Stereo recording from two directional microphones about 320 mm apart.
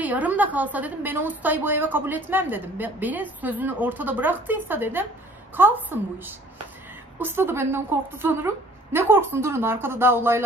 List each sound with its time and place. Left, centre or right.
0.0 s a woman's voice: centre